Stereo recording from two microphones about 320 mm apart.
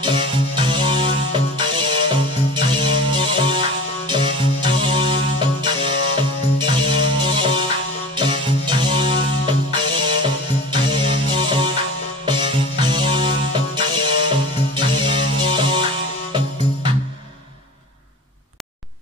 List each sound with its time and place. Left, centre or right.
0.0 s music: centre